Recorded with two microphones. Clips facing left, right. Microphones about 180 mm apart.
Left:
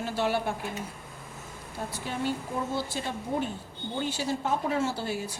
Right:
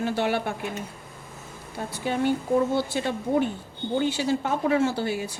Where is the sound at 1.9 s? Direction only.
65° right (ahead or behind).